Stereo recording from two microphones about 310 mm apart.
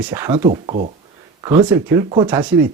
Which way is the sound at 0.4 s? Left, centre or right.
Centre.